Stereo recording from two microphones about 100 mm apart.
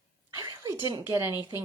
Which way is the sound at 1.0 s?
25° right (ahead or behind).